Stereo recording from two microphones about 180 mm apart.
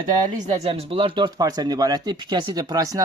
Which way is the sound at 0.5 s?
35° right (ahead or behind).